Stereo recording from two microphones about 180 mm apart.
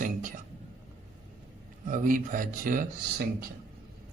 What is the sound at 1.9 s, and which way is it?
Speech, 50° right (ahead or behind).